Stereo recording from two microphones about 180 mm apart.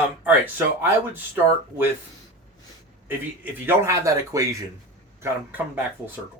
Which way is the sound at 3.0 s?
10° right (ahead or behind).